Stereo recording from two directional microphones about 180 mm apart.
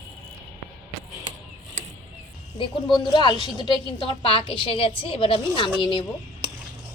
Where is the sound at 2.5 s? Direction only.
30° left (ahead or behind).